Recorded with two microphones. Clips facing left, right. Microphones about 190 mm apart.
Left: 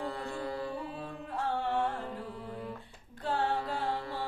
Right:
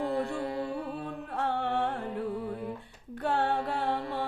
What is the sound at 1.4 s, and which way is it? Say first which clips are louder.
Carnatic music: right 2 dB; 65° right (ahead or behind).